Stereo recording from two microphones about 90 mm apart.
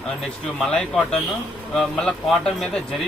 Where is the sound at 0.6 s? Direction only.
10° left (ahead or behind).